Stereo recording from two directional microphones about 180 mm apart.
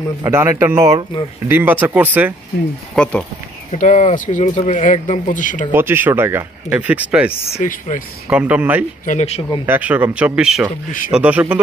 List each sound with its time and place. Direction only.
0.2 s speech: 15° right (ahead or behind)
3.0 s speech: 5° left (ahead or behind)
3.7 s speech: 45° left (ahead or behind)
5.7 s speech: 10° right (ahead or behind)
7.5 s speech: 45° left (ahead or behind)
8.3 s speech: 5° right (ahead or behind)
9.0 s speech: 40° left (ahead or behind)
9.7 s speech: 10° right (ahead or behind)